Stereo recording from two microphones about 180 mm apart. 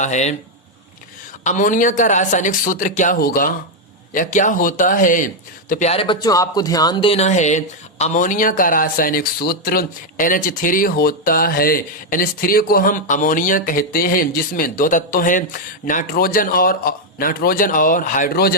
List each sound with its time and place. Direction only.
0.0 s speech: 40° left (ahead or behind)
1.5 s speech: 45° left (ahead or behind)
5.9 s speech: 30° left (ahead or behind); by 18.5 s 55° left (ahead or behind)